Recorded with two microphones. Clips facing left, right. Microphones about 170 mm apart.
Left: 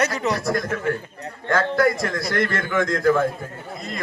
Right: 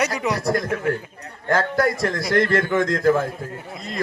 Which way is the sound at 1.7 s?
30° right (ahead or behind).